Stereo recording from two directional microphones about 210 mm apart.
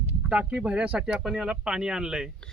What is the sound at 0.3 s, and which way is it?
Speech, 5° right (ahead or behind).